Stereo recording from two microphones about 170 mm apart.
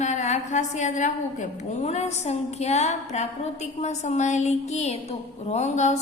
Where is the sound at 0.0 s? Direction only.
45° left (ahead or behind).